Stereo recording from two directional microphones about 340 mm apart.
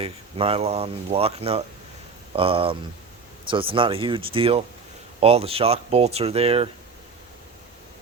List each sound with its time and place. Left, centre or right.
0.0 s speech: centre